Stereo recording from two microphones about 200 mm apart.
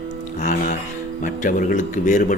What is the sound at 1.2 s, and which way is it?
A man's voice, 40° left (ahead or behind).